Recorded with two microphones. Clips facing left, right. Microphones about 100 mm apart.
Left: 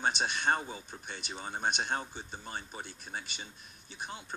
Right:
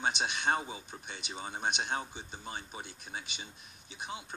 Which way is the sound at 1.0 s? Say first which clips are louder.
Left 1 dB; 45° left (ahead or behind).